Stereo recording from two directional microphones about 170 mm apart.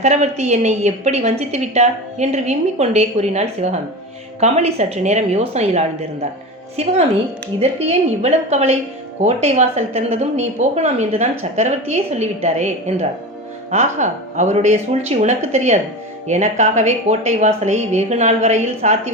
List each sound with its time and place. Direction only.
0.0 s a woman's voice: 40° right (ahead or behind)